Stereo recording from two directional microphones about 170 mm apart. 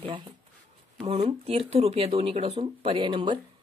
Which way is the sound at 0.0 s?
30° right (ahead or behind).